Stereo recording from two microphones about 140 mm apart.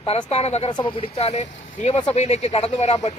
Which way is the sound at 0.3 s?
50° left (ahead or behind).